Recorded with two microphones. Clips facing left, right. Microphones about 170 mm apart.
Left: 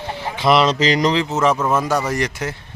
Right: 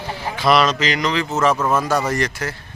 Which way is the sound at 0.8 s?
35° left (ahead or behind).